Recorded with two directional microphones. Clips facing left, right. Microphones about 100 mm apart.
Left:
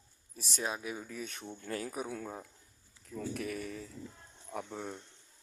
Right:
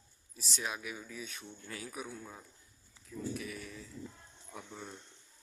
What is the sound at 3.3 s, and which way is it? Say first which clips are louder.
Speech: left 6 dB; 55° left (ahead or behind).